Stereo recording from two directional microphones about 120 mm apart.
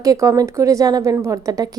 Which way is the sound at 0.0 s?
30° right (ahead or behind).